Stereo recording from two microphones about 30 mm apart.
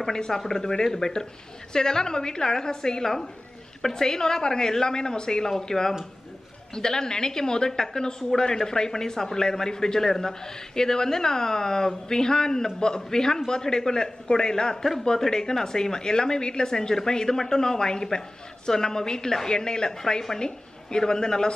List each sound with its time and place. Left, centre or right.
0.1 s a man's voice: left
8.2 s a man's voice: centre
8.6 s a man's voice: left